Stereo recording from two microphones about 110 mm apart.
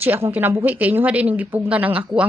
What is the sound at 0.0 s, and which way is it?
A woman's voice, 15° right (ahead or behind).